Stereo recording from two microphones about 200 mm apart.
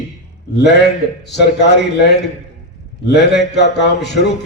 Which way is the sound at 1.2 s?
55° left (ahead or behind).